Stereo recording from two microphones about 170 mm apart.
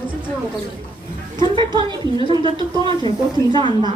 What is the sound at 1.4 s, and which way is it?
Speech, 30° right (ahead or behind).